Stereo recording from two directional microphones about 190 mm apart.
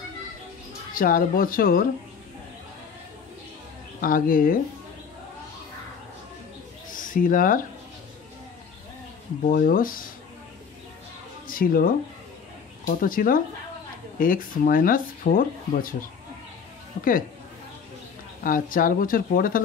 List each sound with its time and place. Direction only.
0.9 s speech: 50° left (ahead or behind)
4.0 s speech: 45° left (ahead or behind)
6.9 s a sound: 45° left (ahead or behind)
9.4 s speech: 50° left (ahead or behind)
11.4 s speech: 50° left (ahead or behind)
18.4 s speech: 45° left (ahead or behind)